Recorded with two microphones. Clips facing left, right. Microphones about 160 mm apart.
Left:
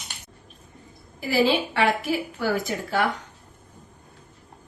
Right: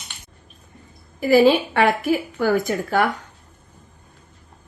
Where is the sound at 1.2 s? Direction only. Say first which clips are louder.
Right 7 dB; 50° right (ahead or behind).